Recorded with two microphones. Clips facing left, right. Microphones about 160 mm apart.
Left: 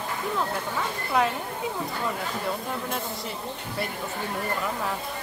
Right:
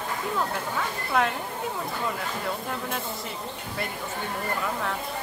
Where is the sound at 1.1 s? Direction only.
Centre (ahead or behind).